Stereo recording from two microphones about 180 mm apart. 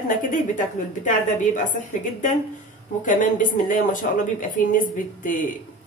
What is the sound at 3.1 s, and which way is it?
A woman's voice, 45° left (ahead or behind).